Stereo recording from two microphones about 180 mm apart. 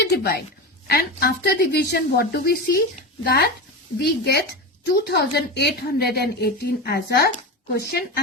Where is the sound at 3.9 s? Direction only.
65° left (ahead or behind).